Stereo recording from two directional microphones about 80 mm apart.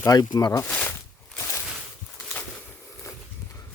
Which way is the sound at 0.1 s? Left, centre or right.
Left.